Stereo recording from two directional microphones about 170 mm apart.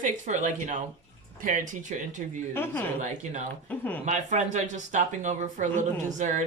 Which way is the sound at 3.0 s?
45° right (ahead or behind).